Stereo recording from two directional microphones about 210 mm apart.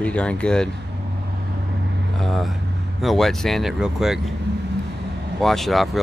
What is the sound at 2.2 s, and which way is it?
Speech, centre (ahead or behind).